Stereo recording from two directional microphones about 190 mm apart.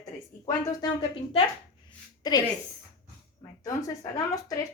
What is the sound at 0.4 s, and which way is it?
Speech, 20° left (ahead or behind).